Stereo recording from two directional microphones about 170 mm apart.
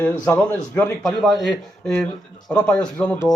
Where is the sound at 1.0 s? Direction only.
Centre (ahead or behind).